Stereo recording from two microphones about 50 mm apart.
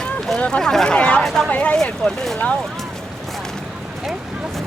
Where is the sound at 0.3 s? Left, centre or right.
Centre.